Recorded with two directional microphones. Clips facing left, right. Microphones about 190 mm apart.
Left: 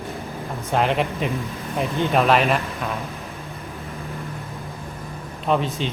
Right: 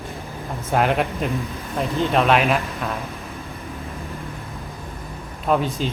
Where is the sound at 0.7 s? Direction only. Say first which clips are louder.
Right 1 dB; 5° right (ahead or behind).